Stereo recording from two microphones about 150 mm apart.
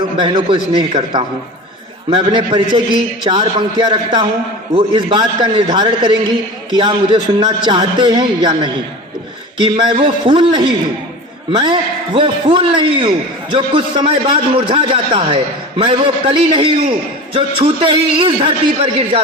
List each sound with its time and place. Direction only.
0.2 s a man's voice: 35° right (ahead or behind)